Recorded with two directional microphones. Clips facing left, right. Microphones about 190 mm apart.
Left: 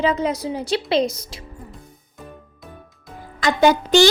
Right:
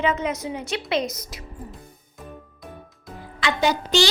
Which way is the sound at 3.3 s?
50° left (ahead or behind).